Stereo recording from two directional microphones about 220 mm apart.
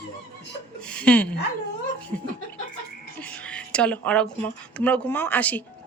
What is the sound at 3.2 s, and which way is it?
Speech, 5° left (ahead or behind).